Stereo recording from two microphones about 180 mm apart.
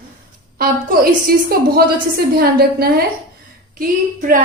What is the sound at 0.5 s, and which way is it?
A woman's voice, 55° right (ahead or behind).